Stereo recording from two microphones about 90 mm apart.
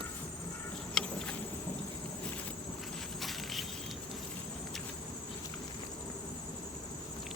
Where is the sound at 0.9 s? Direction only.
10° left (ahead or behind).